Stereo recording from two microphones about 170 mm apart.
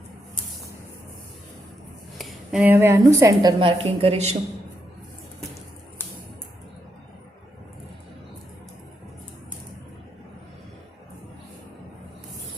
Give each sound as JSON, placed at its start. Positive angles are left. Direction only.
{"t": 2.1, "sound": "a woman's voice", "side_deg": 0}
{"t": 3.6, "sound": "speech", "side_deg": -30}